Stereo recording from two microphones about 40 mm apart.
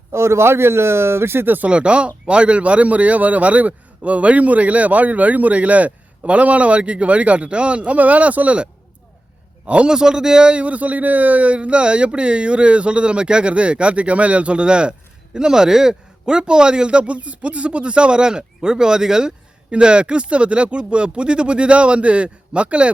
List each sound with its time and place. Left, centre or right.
0.3 s speech: right
1.6 s speech: right
9.6 s speech: right
9.9 s a man's voice: centre
19.7 s a man's voice: right